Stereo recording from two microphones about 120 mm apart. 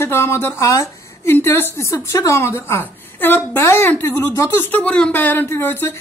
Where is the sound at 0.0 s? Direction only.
20° left (ahead or behind).